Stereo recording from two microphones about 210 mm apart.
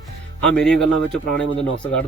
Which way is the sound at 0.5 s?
5° left (ahead or behind).